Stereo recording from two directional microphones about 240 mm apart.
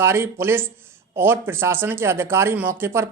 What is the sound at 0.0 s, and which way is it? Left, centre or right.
Speech, centre.